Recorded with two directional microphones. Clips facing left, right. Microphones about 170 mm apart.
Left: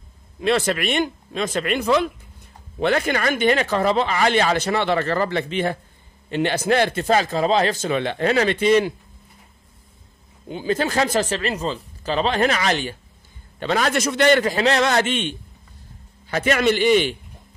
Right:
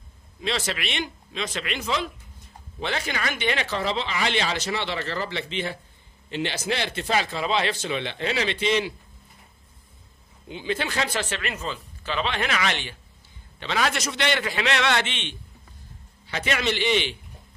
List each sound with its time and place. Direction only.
0.4 s speech: 55° left (ahead or behind)
10.5 s speech: 40° left (ahead or behind)